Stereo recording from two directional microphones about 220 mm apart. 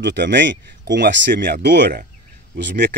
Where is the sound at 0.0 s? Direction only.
55° right (ahead or behind).